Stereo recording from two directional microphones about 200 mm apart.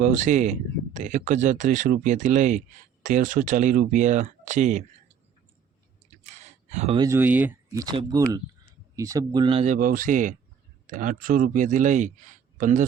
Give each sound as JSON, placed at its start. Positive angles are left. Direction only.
{"t": 0.0, "sound": "speech", "side_deg": -40}
{"t": 6.1, "sound": "a sound", "side_deg": -35}
{"t": 7.0, "sound": "speech", "side_deg": -10}
{"t": 9.7, "sound": "speech", "side_deg": -40}